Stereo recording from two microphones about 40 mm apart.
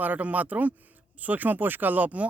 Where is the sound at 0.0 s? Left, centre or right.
Right.